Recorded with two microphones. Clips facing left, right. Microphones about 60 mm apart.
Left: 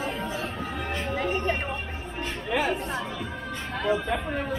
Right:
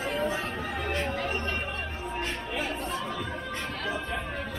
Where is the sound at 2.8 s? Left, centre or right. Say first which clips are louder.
Left 1 dB; left.